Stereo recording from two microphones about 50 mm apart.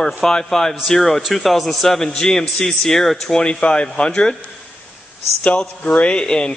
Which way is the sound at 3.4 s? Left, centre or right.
Centre.